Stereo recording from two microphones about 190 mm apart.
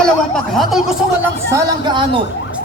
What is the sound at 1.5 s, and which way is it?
Speech, 20° right (ahead or behind).